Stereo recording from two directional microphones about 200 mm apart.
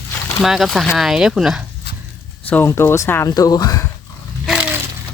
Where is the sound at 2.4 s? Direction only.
10° left (ahead or behind).